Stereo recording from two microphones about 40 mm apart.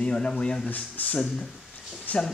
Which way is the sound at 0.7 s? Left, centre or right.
Left.